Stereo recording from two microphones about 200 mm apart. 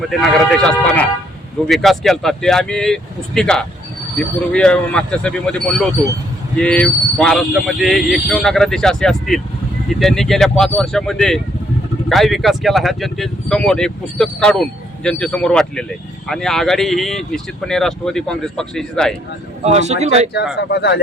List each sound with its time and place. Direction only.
0.0 s speech: centre (ahead or behind)
19.6 s speech: 35° right (ahead or behind)
20.6 s speech: 55° left (ahead or behind)